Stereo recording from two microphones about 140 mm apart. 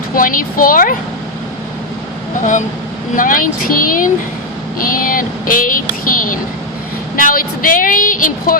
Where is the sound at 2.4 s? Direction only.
60° left (ahead or behind).